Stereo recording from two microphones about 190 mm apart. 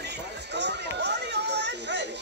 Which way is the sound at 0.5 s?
65° right (ahead or behind).